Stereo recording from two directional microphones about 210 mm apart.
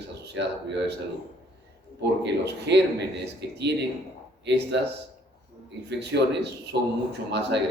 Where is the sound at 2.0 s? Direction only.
55° right (ahead or behind).